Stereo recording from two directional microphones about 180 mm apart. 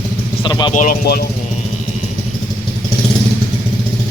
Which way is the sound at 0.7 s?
45° left (ahead or behind).